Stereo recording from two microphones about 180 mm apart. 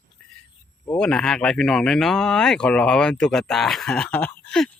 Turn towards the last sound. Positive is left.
turn(degrees=5)  # may be behind; listen again after turning